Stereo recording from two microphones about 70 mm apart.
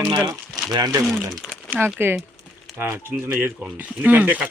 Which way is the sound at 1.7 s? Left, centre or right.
Right.